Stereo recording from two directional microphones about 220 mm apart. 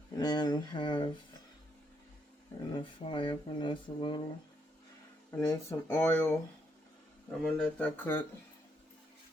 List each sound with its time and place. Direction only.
0.2 s speech: 20° left (ahead or behind)
2.7 s speech: 20° left (ahead or behind)
5.3 s speech: 10° left (ahead or behind)